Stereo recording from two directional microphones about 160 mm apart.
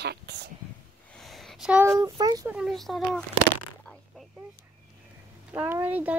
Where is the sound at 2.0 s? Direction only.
25° right (ahead or behind).